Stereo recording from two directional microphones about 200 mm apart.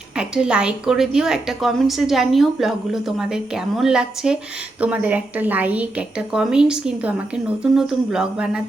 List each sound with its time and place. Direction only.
0.2 s a woman's voice: 5° right (ahead or behind)